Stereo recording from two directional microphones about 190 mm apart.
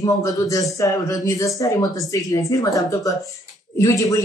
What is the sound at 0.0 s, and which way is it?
A man's voice, 20° left (ahead or behind).